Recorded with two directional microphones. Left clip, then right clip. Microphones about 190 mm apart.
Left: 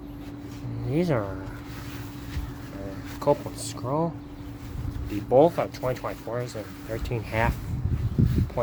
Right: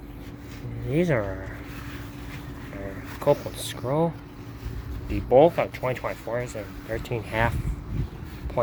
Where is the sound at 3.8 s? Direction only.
10° right (ahead or behind).